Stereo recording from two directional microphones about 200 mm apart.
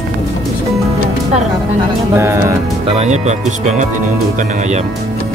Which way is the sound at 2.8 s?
30° right (ahead or behind).